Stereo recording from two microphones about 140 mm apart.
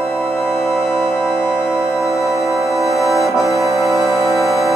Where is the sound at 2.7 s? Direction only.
Centre (ahead or behind).